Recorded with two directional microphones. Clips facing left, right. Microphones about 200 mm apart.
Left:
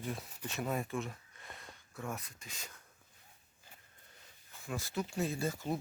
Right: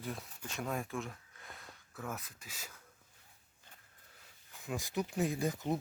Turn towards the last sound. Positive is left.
turn(degrees=-20)  # may be behind; listen again after turning